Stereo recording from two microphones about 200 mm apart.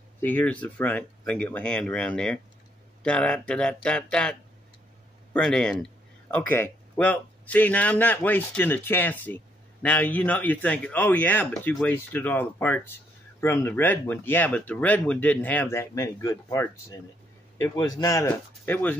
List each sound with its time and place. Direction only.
0.2 s a man's voice: 10° left (ahead or behind)
18.0 s a man's voice: 15° left (ahead or behind)